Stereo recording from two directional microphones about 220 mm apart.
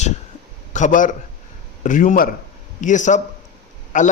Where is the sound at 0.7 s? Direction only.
35° left (ahead or behind).